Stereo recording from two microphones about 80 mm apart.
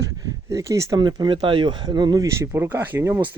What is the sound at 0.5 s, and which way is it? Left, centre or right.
Speech, right.